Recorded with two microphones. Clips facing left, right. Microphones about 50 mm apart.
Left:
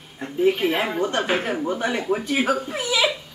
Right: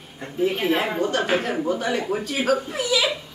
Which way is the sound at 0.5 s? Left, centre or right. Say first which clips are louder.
Left 3 dB; centre.